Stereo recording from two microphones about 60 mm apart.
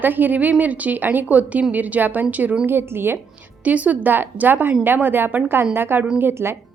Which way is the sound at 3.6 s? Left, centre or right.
Right.